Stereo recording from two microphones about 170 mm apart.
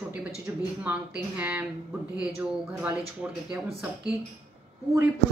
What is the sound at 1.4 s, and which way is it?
Speech, 10° right (ahead or behind).